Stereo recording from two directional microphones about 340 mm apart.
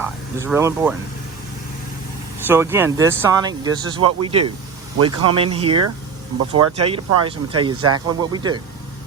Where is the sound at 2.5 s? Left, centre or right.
Centre.